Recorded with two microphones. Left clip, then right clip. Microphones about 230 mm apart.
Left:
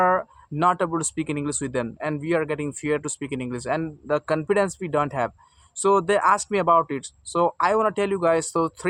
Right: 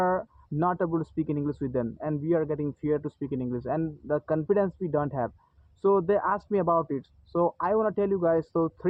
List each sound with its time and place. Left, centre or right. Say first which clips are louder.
0.0 s speech: left 6 dB; left